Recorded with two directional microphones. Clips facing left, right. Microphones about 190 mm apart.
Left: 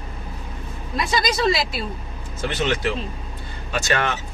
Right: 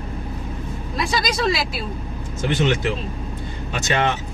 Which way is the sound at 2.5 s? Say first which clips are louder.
Right 3 dB; 15° right (ahead or behind).